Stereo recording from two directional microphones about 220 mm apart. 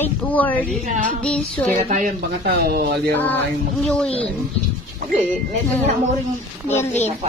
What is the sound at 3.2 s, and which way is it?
Speech, 10° left (ahead or behind).